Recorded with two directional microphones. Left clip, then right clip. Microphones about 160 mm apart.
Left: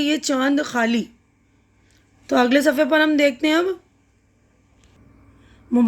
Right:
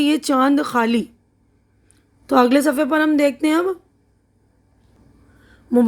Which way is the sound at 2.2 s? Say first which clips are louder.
Right 2 dB; 50° right (ahead or behind).